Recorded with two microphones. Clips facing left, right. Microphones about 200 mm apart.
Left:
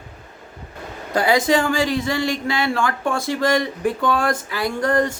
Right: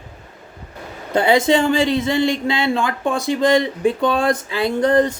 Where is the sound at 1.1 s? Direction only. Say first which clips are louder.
Right 3 dB; 25° right (ahead or behind).